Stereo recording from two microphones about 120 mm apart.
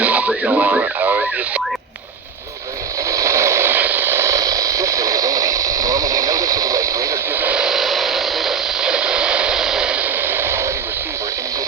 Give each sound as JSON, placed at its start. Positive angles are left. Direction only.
{"t": 0.0, "sound": "a sound", "side_deg": -10}
{"t": 3.1, "sound": "radio", "side_deg": -25}
{"t": 7.3, "sound": "radio", "side_deg": -10}